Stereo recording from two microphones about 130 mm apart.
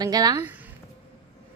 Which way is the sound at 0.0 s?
30° right (ahead or behind).